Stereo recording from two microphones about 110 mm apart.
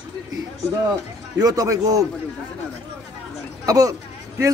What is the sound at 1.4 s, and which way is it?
Speech, 35° right (ahead or behind).